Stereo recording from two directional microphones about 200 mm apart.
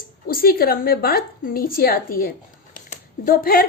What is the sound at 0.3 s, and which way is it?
A woman's voice, 45° left (ahead or behind).